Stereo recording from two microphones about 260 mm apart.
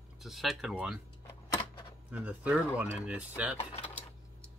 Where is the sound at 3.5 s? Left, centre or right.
Left.